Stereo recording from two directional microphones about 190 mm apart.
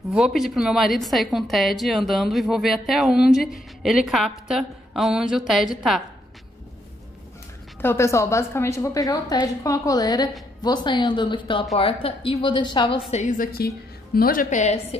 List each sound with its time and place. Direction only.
0.1 s a woman's voice: centre (ahead or behind)
7.8 s a woman's voice: 15° left (ahead or behind)
13.1 s a woman's voice: 40° left (ahead or behind)
13.5 s a woman's voice: 55° left (ahead or behind); by 15.0 s 35° left (ahead or behind)